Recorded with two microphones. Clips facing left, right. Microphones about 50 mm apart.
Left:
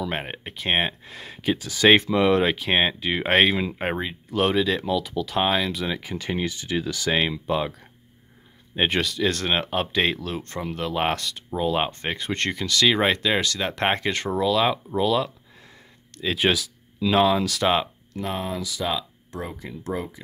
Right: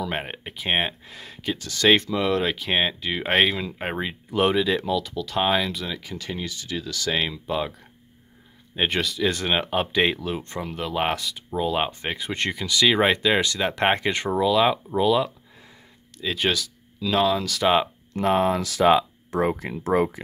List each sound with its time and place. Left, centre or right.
0.0 s speech: centre
4.0 s speech: centre
5.9 s speech: left
7.2 s speech: centre
10.6 s speech: centre
14.4 s speech: centre
16.2 s speech: centre
17.6 s speech: centre
18.2 s speech: right
18.6 s speech: right